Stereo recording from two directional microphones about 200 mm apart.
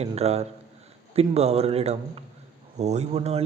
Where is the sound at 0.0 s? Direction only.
30° right (ahead or behind).